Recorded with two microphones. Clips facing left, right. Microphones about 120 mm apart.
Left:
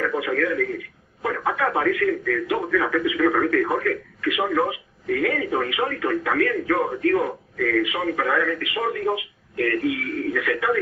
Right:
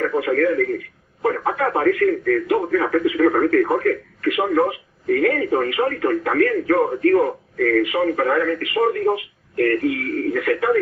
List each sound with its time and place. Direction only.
0.2 s speech: 45° right (ahead or behind)